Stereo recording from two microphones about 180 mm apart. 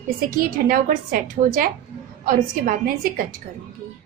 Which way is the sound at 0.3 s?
50° right (ahead or behind).